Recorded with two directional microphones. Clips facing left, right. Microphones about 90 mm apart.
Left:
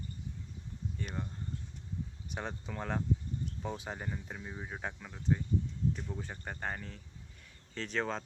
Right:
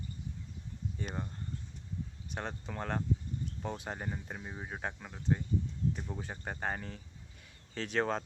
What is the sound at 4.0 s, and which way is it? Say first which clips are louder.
Speech: right 1 dB; 15° right (ahead or behind).